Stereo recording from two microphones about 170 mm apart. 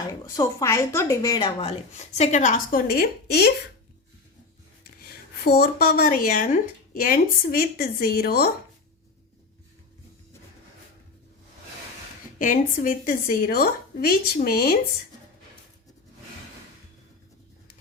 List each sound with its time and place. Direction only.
0.1 s a woman's voice: 20° left (ahead or behind); by 3.5 s 70° left (ahead or behind)
4.8 s a woman's voice: 65° left (ahead or behind)
12.4 s a woman's voice: 50° left (ahead or behind)